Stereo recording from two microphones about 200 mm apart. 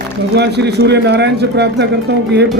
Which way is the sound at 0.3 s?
55° right (ahead or behind).